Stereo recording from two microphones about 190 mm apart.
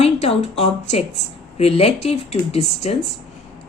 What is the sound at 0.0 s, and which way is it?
A woman's voice, 35° left (ahead or behind).